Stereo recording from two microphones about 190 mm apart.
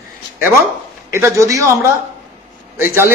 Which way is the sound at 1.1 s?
15° right (ahead or behind).